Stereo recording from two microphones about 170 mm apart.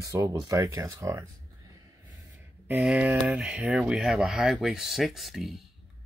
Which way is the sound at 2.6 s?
Centre (ahead or behind).